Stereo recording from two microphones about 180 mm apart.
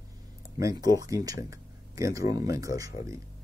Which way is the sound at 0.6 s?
20° right (ahead or behind).